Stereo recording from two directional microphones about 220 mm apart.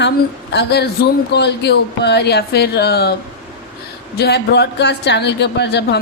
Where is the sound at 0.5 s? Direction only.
50° left (ahead or behind).